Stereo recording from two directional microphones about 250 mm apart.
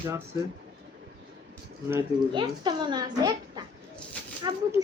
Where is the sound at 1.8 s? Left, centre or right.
Centre.